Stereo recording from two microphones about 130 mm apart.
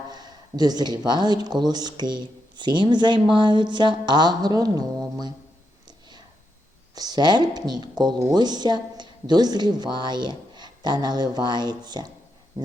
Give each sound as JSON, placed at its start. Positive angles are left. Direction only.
{"t": 0.1, "sound": "speech", "side_deg": -30}
{"t": 6.9, "sound": "speech", "side_deg": -30}
{"t": 12.6, "sound": "a sound", "side_deg": -35}